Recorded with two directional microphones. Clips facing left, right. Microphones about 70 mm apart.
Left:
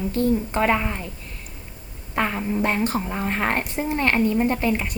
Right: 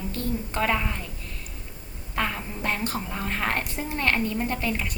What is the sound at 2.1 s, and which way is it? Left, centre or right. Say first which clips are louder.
A woman's voice: left 6 dB; left.